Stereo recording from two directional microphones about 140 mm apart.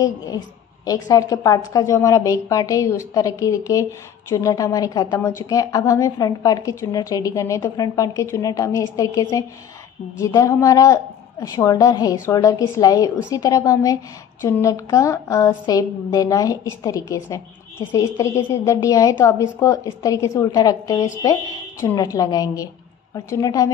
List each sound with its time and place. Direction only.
0.8 s a woman's voice: 25° left (ahead or behind)